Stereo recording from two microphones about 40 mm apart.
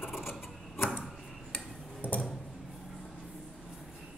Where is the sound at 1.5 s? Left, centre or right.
Left.